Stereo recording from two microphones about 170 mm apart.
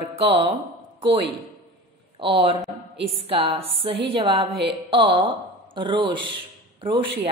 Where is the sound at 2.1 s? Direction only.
30° right (ahead or behind).